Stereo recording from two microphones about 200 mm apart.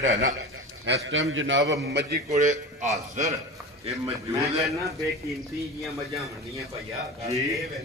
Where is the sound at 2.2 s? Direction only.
35° right (ahead or behind).